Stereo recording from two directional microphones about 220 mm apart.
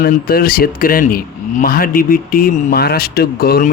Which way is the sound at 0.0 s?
40° left (ahead or behind).